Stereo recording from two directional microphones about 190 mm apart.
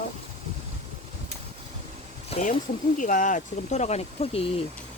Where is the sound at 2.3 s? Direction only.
40° left (ahead or behind).